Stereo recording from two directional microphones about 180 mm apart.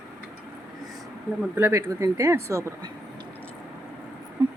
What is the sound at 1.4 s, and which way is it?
Speech, 10° right (ahead or behind).